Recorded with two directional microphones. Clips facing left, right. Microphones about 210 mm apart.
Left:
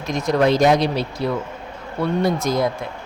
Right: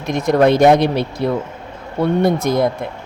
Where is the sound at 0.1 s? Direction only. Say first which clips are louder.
Right 4 dB; 55° right (ahead or behind).